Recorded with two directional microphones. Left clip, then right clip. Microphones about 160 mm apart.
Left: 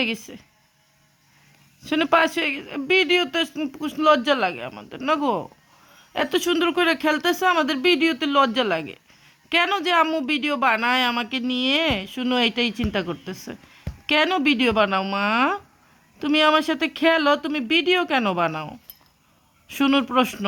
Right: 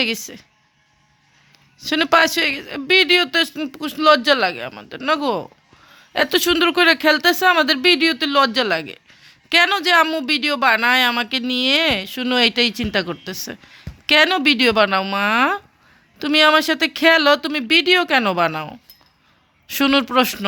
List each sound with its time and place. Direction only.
0.0 s a man's voice: centre (ahead or behind)
1.8 s a man's voice: centre (ahead or behind)